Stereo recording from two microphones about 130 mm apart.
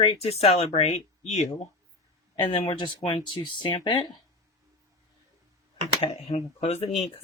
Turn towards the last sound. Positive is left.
turn(degrees=50)  # may be behind; listen again after turning